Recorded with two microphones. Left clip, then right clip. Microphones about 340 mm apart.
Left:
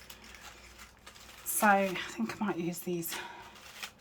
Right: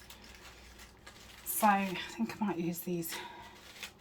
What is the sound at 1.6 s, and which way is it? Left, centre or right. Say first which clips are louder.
Speech: left 3 dB; centre.